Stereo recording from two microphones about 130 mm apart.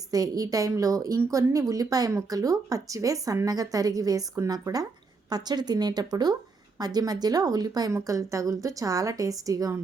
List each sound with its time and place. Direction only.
0.1 s a woman's voice: 30° right (ahead or behind)